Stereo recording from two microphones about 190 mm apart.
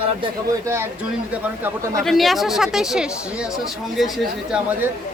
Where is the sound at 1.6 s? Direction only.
15° right (ahead or behind).